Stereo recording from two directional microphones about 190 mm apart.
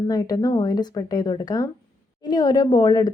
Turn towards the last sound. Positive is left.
turn(degrees=20)  # may be behind; listen again after turning